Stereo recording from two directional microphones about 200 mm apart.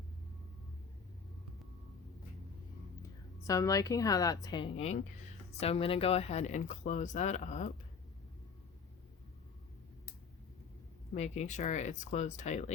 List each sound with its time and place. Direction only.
3.4 s a woman's voice: 15° left (ahead or behind); by 7.7 s 35° left (ahead or behind)
11.1 s speech: 35° left (ahead or behind)